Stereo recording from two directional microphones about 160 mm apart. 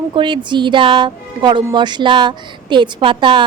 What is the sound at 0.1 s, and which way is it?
A woman's voice, 30° right (ahead or behind).